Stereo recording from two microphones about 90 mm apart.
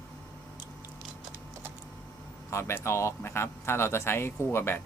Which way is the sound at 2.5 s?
30° left (ahead or behind).